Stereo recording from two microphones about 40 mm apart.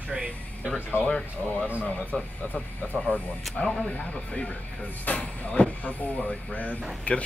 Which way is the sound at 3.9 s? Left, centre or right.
Left.